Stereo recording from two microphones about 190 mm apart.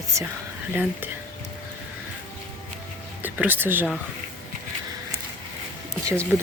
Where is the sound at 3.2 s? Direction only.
10° right (ahead or behind).